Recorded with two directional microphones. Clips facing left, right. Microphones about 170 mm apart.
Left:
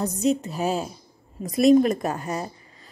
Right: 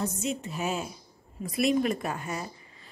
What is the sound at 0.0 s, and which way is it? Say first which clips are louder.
A woman's voice: left 8 dB; 35° left (ahead or behind).